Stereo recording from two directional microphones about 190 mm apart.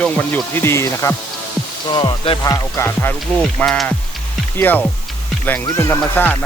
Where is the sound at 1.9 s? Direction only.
25° left (ahead or behind).